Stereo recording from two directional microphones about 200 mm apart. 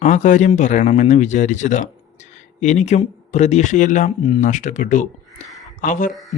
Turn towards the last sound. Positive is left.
turn(degrees=40)  # may be behind; listen again after turning